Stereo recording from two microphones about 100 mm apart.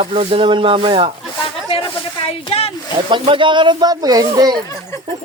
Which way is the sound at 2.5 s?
90° left.